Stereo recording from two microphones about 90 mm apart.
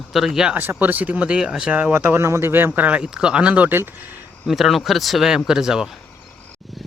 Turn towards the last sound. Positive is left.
turn(degrees=-5)  # may be behind; listen again after turning